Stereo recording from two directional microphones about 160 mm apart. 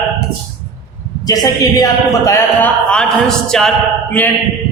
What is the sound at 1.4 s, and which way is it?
Speech, 20° left (ahead or behind).